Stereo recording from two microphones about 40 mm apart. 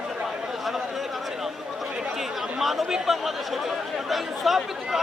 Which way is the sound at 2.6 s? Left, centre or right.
Centre.